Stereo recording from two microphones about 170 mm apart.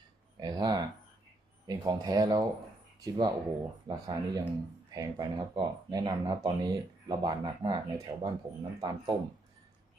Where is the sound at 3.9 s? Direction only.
25° right (ahead or behind).